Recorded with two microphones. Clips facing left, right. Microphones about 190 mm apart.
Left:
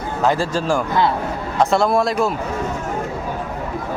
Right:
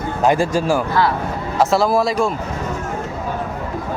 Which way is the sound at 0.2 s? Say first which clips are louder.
Right 3 dB; 15° right (ahead or behind).